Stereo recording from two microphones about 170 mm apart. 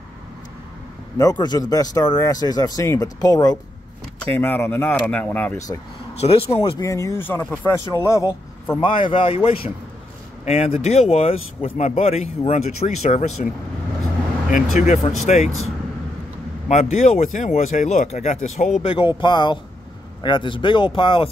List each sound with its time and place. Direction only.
1.1 s speech: 20° left (ahead or behind)
4.2 s speech: 10° left (ahead or behind)
6.2 s speech: 35° left (ahead or behind)
6.8 s speech: 20° left (ahead or behind)
8.8 s speech: 30° left (ahead or behind)
14.8 s speech: 45° left (ahead or behind)
16.6 s speech: 40° left (ahead or behind)
18.9 s speech: 30° left (ahead or behind)